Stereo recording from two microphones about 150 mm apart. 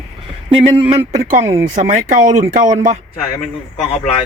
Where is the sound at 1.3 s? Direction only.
60° right (ahead or behind).